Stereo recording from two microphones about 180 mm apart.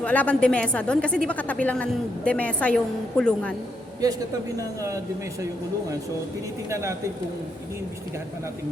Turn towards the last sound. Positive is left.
turn(degrees=-15)  # may be behind; listen again after turning